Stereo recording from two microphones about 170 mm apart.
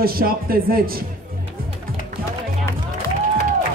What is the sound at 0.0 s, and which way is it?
Speech, 60° right (ahead or behind).